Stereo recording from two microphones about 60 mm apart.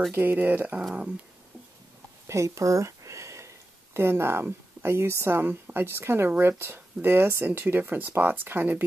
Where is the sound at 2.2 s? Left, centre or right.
Right.